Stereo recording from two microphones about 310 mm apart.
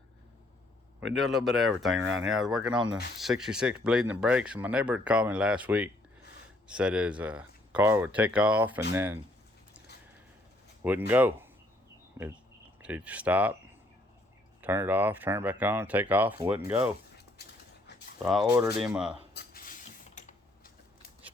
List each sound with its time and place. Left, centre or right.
1.1 s speech: centre
11.1 s speech: centre
14.6 s speech: centre
17.4 s a sound: left
18.2 s speech: centre
19.3 s a sound: left